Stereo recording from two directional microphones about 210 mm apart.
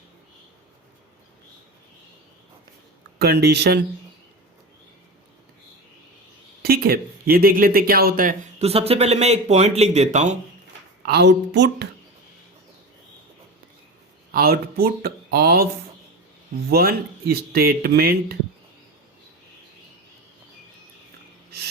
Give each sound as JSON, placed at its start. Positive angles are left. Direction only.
{"t": 3.2, "sound": "speech", "side_deg": -50}
{"t": 6.6, "sound": "speech", "side_deg": -45}
{"t": 11.0, "sound": "speech", "side_deg": -50}
{"t": 14.3, "sound": "speech", "side_deg": -45}
{"t": 16.6, "sound": "speech", "side_deg": -45}